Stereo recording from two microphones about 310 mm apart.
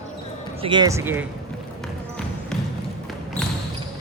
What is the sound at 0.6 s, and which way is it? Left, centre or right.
Speech, centre.